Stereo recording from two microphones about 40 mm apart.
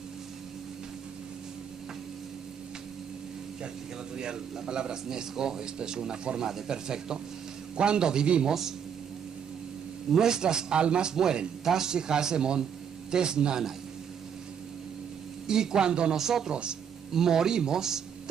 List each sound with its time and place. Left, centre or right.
4.2 s a man's voice: centre
8.5 s speech: centre
10.1 s a man's voice: centre
15.4 s speech: centre
16.2 s speech: centre